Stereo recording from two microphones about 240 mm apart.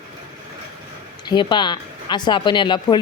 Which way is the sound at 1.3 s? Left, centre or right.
Centre.